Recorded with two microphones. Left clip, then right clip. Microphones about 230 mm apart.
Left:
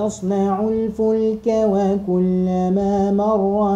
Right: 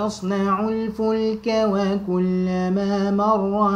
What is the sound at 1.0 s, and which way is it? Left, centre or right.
Mantra, right.